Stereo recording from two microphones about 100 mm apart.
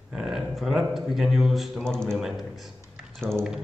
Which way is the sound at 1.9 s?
10° left (ahead or behind).